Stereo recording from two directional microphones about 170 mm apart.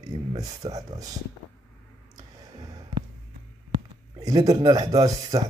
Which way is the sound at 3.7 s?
25° right (ahead or behind).